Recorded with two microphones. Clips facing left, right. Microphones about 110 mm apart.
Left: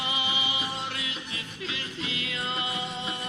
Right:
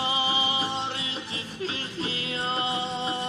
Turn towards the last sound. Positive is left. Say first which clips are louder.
# right 5 dB
turn(degrees=-30)  # may be behind; listen again after turning